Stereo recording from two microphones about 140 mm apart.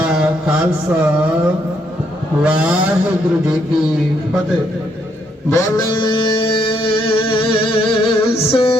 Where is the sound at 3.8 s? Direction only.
5° right (ahead or behind).